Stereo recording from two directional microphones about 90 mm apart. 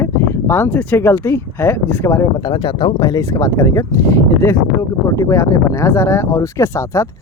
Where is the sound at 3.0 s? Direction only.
40° left (ahead or behind).